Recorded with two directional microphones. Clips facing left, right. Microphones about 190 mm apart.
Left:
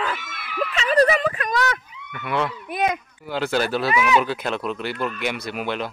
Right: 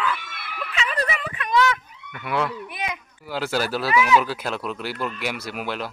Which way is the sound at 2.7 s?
45° left (ahead or behind).